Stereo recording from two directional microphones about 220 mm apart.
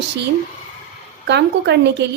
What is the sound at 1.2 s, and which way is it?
Speech, 50° right (ahead or behind).